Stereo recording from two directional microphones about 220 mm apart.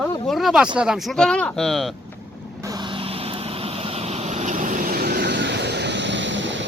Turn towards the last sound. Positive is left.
turn(degrees=-55)  # may be behind; listen again after turning